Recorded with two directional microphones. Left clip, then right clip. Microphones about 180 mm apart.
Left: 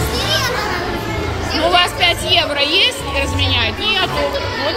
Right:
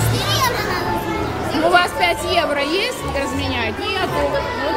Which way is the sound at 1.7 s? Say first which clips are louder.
Left 2 dB; 30° right (ahead or behind).